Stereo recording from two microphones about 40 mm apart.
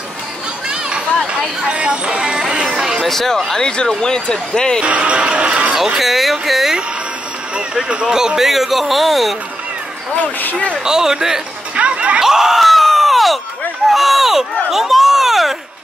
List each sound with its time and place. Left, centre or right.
0.7 s a sound: right
1.7 s speech: right
2.7 s music: centre
3.0 s speech: centre
3.5 s speech: centre
4.8 s speech: right
5.9 s speech: centre
7.5 s speech: right; by 9.3 s centre
10.2 s speech: left
10.8 s speech: centre
11.7 s a sound: right
12.2 s a sound: centre
12.5 s a sound: centre